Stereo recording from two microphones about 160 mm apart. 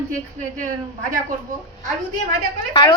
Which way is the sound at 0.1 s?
55° right (ahead or behind).